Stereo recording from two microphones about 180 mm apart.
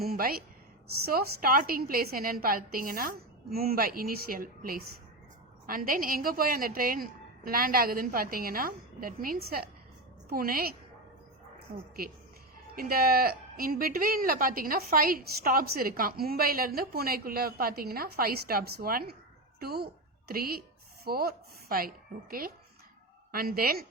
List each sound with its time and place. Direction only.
0.0 s a woman's voice: 55° right (ahead or behind)
12.7 s a woman's voice: 55° right (ahead or behind)